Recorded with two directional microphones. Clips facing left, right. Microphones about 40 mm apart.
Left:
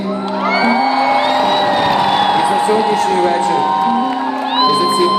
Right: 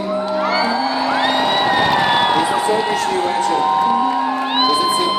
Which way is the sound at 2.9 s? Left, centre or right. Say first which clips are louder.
Left 4 dB; left.